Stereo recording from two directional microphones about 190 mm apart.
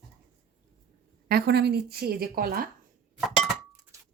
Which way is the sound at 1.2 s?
55° right (ahead or behind).